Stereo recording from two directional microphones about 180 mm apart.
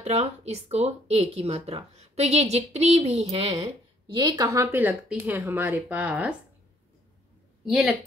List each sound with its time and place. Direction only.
0.0 s a woman's voice: 40° right (ahead or behind); by 6.3 s 5° right (ahead or behind)
7.6 s a woman's voice: centre (ahead or behind)